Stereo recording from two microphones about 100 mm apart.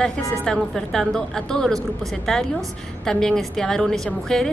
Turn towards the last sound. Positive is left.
turn(degrees=5)  # may be behind; listen again after turning